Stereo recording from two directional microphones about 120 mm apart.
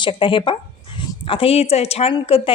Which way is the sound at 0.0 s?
45° left (ahead or behind).